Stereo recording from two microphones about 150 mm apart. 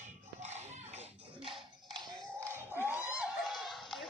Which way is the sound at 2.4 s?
15° right (ahead or behind).